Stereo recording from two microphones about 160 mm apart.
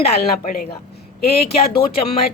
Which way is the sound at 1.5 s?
40° left (ahead or behind).